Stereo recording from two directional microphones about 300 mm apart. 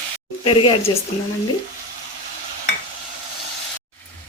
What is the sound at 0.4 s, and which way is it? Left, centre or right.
Speech, centre.